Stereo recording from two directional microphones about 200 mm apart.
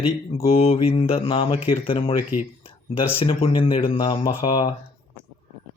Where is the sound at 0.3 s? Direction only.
30° left (ahead or behind).